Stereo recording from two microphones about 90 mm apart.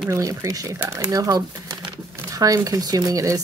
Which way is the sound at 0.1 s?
35° right (ahead or behind).